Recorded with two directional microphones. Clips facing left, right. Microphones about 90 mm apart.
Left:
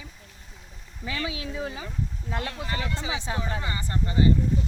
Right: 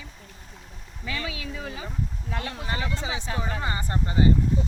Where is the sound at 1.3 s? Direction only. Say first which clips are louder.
Left 2 dB; 20° left (ahead or behind).